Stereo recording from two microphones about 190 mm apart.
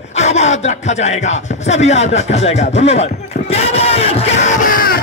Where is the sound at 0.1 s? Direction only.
35° left (ahead or behind).